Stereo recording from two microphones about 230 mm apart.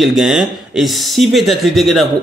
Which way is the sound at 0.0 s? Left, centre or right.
Centre.